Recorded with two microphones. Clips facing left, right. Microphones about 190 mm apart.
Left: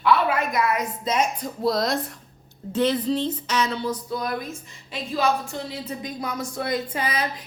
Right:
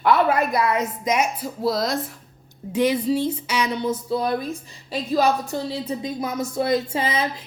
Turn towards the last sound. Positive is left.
turn(degrees=-25)  # may be behind; listen again after turning